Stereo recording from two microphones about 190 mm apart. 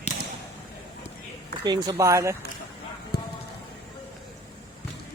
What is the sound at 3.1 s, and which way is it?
Music, 55° left (ahead or behind).